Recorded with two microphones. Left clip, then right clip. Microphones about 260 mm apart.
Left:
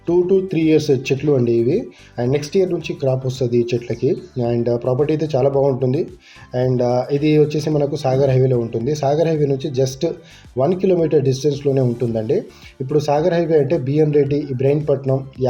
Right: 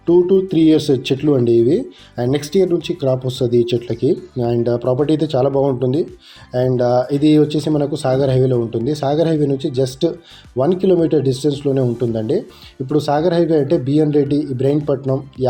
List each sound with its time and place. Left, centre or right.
0.0 s speech: right